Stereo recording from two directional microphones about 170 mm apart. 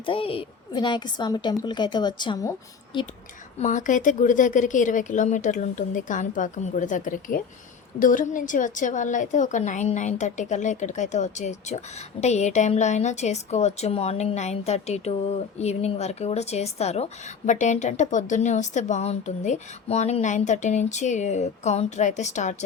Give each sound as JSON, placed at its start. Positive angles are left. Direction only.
{"t": 0.0, "sound": "a woman's voice", "side_deg": 30}
{"t": 3.6, "sound": "a woman's voice", "side_deg": 45}